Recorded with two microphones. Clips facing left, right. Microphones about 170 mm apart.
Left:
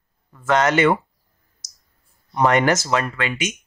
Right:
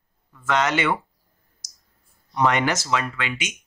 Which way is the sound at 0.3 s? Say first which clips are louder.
Left 4 dB; 45° left (ahead or behind).